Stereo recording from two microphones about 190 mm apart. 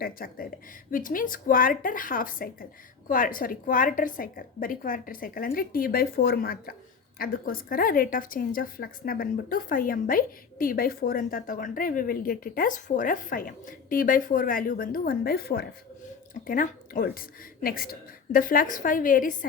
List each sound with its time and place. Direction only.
0.0 s a woman's voice: 50° left (ahead or behind)
16.3 s a woman's voice: 45° left (ahead or behind)